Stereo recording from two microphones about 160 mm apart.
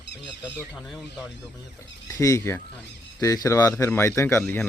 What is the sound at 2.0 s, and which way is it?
Speech, 20° left (ahead or behind).